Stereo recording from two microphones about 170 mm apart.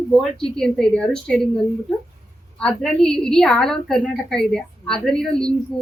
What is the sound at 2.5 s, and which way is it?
A woman's voice, 5° left (ahead or behind).